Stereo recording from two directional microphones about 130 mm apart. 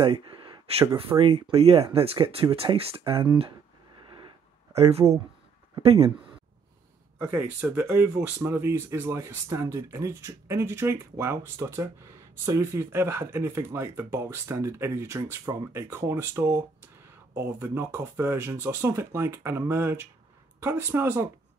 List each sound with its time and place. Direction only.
0.0 s a sound: 40° right (ahead or behind)
1.2 s speech: 50° right (ahead or behind)
4.7 s speech: 55° right (ahead or behind)
7.2 s speech: 10° right (ahead or behind)